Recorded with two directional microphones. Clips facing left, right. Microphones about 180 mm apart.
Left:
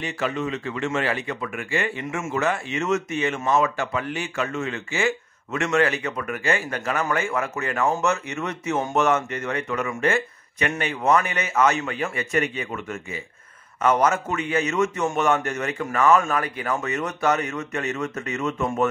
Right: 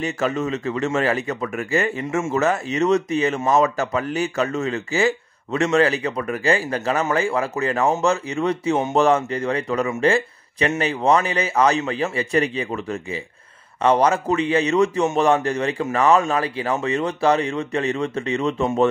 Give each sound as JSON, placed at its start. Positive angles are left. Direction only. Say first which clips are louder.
{"t": 0.0, "sound": "speech", "louder": "right 4 dB", "side_deg": -45}